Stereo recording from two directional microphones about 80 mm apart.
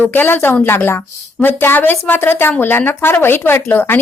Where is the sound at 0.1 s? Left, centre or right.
Left.